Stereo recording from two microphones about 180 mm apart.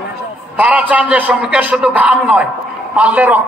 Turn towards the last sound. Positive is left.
turn(degrees=-10)  # may be behind; listen again after turning